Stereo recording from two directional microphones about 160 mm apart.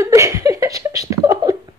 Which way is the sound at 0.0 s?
20° right (ahead or behind).